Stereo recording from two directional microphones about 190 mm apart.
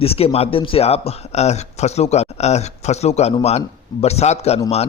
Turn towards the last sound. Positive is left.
turn(degrees=35)  # may be behind; listen again after turning